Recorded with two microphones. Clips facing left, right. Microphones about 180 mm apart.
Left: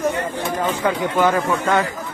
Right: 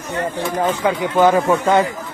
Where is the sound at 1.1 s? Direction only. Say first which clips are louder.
Right 7 dB; 20° right (ahead or behind).